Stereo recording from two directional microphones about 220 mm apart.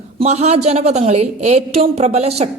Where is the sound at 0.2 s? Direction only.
30° right (ahead or behind).